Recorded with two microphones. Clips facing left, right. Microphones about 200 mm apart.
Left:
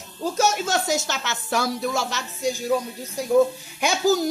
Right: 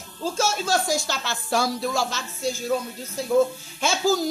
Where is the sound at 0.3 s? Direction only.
15° left (ahead or behind).